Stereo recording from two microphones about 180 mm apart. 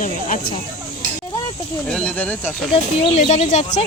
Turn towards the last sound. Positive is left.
turn(degrees=40)  # may be behind; listen again after turning